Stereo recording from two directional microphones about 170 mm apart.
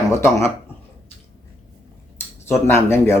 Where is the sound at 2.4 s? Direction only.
15° left (ahead or behind).